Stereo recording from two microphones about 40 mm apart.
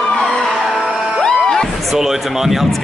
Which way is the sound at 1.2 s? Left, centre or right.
Centre.